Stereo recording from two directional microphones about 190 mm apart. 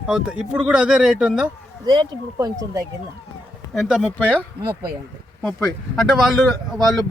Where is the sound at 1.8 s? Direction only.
20° right (ahead or behind).